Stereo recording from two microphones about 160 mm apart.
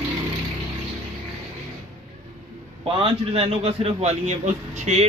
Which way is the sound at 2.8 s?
35° right (ahead or behind).